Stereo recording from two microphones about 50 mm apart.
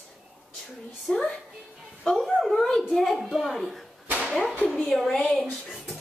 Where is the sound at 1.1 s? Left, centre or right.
Centre.